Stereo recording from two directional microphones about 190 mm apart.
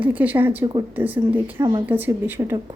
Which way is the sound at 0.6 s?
20° right (ahead or behind).